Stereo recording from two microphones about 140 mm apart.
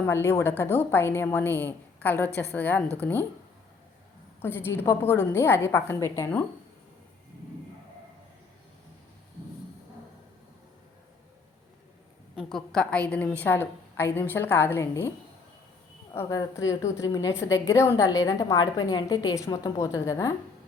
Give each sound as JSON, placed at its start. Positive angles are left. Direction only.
{"t": 0.0, "sound": "a woman's voice", "side_deg": 15}
{"t": 4.4, "sound": "a woman's voice", "side_deg": 15}
{"t": 12.4, "sound": "a woman's voice", "side_deg": 0}
{"t": 16.1, "sound": "a woman's voice", "side_deg": 25}